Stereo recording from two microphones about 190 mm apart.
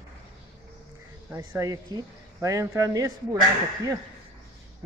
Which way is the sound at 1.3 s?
10° right (ahead or behind).